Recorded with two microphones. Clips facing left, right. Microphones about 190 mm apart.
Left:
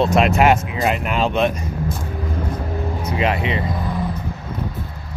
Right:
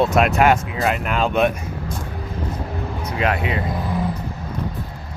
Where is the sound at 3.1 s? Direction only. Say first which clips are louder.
Left 1 dB; centre (ahead or behind).